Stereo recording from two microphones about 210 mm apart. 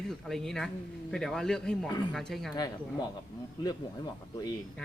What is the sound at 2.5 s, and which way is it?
Speech, 20° left (ahead or behind).